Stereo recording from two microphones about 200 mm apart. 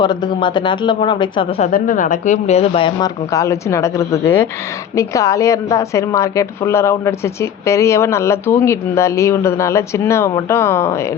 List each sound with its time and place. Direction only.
0.0 s speech: 20° left (ahead or behind)
1.6 s speech: 40° left (ahead or behind); by 10.9 s 15° left (ahead or behind)